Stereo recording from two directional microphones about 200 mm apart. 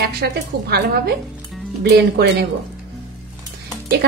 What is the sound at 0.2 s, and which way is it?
A woman's voice, 55° right (ahead or behind).